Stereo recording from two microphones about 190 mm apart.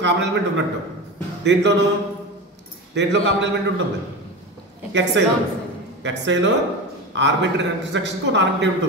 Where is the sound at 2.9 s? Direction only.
65° right (ahead or behind).